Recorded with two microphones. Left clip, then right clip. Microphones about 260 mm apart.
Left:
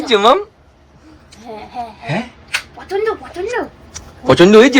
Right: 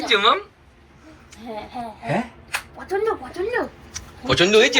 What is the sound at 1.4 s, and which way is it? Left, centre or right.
Speech, centre.